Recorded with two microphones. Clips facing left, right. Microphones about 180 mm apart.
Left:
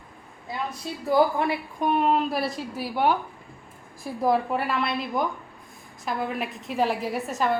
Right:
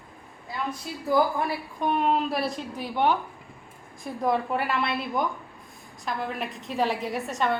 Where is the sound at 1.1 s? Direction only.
25° left (ahead or behind).